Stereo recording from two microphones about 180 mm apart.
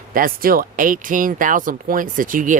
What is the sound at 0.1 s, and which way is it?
Speech, 55° right (ahead or behind).